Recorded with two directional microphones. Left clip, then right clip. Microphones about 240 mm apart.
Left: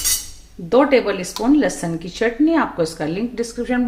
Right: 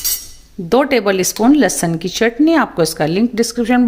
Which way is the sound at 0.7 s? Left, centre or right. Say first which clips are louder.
Right 2 dB; right.